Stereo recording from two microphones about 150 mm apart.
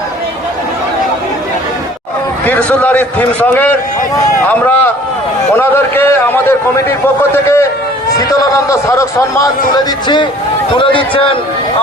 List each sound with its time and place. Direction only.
2.5 s a man's voice: 10° left (ahead or behind); by 11.3 s 35° left (ahead or behind)